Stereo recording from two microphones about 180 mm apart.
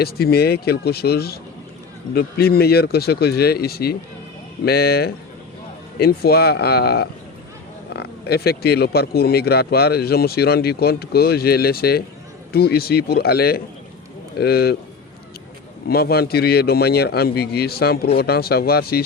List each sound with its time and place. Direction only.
0.0 s speech: 60° left (ahead or behind)
15.9 s speech: 60° left (ahead or behind)